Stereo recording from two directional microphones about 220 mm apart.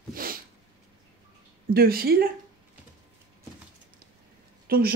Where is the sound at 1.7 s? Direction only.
45° right (ahead or behind).